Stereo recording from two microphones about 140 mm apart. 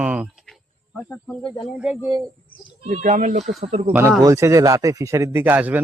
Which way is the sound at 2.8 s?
55° right (ahead or behind).